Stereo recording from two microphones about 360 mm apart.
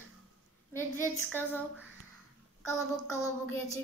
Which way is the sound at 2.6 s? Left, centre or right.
Centre.